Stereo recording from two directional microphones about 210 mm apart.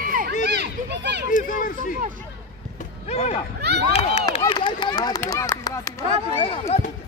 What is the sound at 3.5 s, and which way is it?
Speech, 50° right (ahead or behind).